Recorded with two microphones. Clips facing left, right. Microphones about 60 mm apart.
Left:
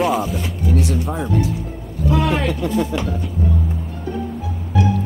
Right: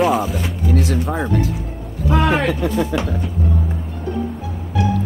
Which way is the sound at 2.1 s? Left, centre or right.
Right.